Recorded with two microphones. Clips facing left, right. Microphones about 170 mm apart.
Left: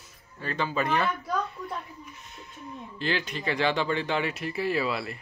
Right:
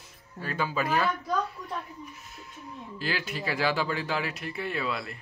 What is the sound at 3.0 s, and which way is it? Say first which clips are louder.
Speech: left 3 dB; 5° right (ahead or behind).